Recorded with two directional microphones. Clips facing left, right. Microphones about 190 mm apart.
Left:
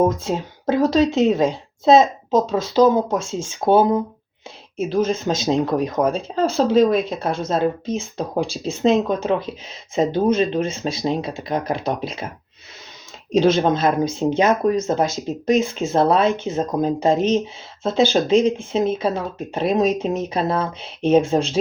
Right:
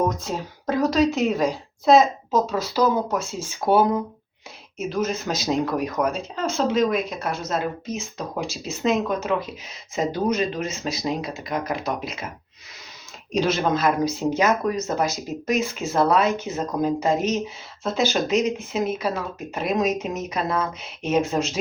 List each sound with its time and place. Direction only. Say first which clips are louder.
0.0 s speech: left 5 dB; 25° left (ahead or behind)
13.3 s speech: left 6 dB; 30° left (ahead or behind)